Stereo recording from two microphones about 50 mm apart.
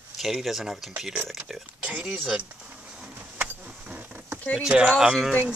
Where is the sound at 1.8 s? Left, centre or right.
Right.